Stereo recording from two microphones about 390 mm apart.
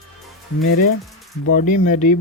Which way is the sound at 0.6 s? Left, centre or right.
Left.